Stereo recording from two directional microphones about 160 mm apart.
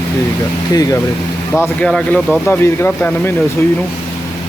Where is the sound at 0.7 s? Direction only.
20° left (ahead or behind).